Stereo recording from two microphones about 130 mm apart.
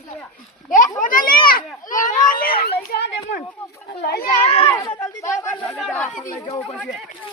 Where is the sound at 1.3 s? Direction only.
40° left (ahead or behind).